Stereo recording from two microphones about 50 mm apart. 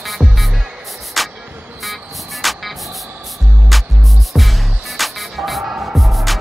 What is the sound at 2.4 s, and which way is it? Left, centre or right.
Music, centre.